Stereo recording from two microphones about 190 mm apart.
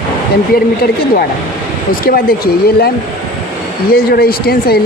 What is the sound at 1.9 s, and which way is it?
Speech, 50° left (ahead or behind).